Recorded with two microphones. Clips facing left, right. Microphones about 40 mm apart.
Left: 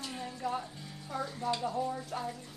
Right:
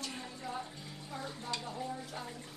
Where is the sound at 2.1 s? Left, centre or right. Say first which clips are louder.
Left 7 dB; left.